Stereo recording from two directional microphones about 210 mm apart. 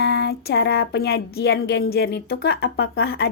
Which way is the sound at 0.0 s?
50° left (ahead or behind).